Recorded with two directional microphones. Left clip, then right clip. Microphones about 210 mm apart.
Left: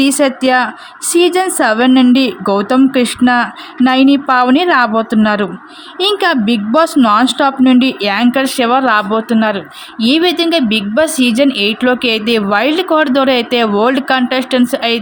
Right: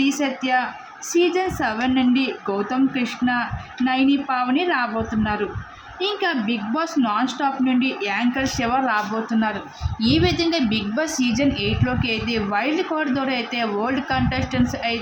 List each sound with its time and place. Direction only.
0.0 s a woman's voice: 50° left (ahead or behind)